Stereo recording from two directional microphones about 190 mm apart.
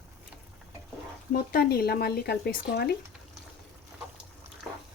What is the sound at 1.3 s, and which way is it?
Speech, 50° left (ahead or behind).